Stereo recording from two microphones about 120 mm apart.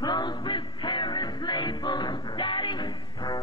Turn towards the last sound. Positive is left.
turn(degrees=35)  # may be behind; listen again after turning